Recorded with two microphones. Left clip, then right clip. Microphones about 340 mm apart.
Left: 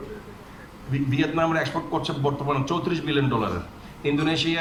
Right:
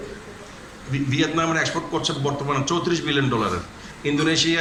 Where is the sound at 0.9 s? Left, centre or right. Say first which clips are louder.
Right 2 dB; left.